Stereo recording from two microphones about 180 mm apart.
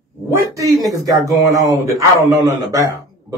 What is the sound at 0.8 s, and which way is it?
Speech, 20° right (ahead or behind).